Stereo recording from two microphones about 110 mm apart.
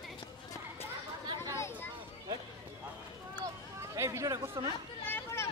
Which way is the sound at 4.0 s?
25° right (ahead or behind).